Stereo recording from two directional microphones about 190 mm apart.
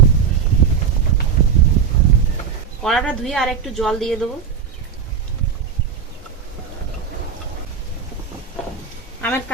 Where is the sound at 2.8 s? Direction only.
Centre (ahead or behind).